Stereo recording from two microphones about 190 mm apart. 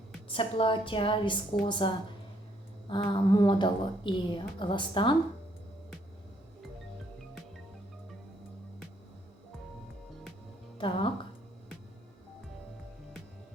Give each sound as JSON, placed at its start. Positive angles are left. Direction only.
{"t": 0.3, "sound": "a woman's voice", "side_deg": 30}
{"t": 10.8, "sound": "speech", "side_deg": 25}